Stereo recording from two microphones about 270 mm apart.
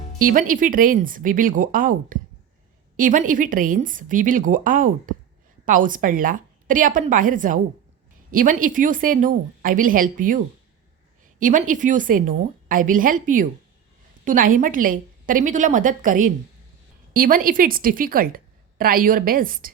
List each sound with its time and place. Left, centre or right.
0.2 s a woman's voice: right